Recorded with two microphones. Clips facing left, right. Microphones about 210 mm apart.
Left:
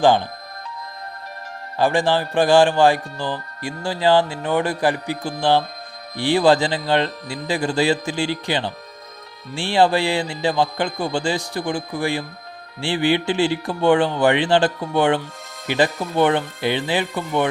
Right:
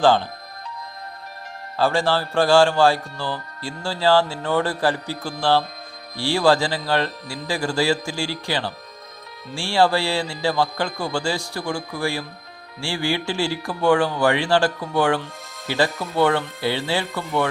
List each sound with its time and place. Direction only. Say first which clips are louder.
0.0 s speech: left 1 dB; 15° left (ahead or behind)
1.8 s speech: left 2 dB; 15° left (ahead or behind)